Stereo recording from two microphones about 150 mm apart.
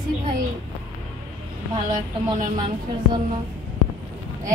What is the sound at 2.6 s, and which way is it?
Speech, 30° right (ahead or behind).